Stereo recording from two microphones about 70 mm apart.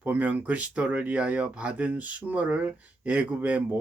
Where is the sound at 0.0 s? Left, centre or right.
Right.